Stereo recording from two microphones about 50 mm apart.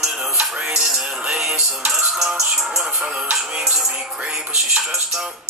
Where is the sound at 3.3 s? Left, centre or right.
Centre.